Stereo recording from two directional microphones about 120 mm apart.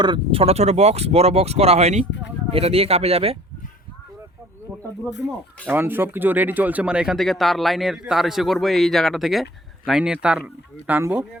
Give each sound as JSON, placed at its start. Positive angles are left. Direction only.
{"t": 0.0, "sound": "speech", "side_deg": -45}
{"t": 2.5, "sound": "speech", "side_deg": -55}
{"t": 5.6, "sound": "speech", "side_deg": -15}